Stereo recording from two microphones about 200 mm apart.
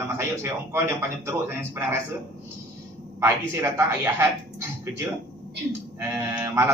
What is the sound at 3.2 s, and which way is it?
A man's voice, 15° right (ahead or behind).